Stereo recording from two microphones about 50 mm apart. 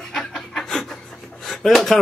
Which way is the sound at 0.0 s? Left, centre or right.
Centre.